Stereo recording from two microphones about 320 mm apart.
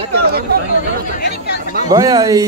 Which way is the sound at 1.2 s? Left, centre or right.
Left.